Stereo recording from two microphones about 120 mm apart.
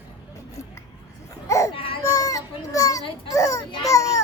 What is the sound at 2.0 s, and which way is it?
Children playing, 25° left (ahead or behind).